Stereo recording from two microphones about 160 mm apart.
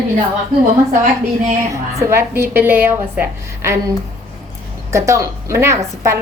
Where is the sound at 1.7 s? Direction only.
15° right (ahead or behind).